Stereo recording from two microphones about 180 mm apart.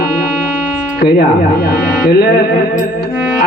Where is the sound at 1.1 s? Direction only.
65° left (ahead or behind).